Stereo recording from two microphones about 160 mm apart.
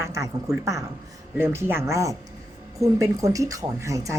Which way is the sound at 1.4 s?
15° right (ahead or behind).